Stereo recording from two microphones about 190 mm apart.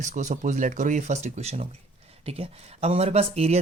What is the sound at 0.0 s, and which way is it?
Speech, 40° right (ahead or behind).